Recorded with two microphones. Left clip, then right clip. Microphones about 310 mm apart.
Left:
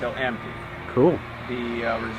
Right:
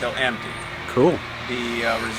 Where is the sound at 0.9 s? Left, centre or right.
Left.